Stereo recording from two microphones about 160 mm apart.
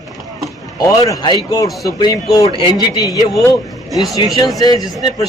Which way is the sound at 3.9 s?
Centre (ahead or behind).